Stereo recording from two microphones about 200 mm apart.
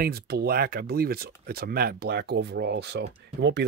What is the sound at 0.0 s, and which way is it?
Speech, 50° right (ahead or behind).